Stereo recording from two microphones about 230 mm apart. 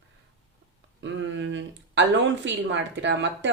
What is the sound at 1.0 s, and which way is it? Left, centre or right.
Speech, right.